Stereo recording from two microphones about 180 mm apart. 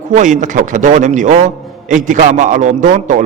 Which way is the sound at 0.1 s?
45° right (ahead or behind).